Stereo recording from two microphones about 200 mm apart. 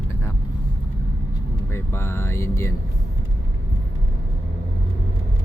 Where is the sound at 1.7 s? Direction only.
10° left (ahead or behind).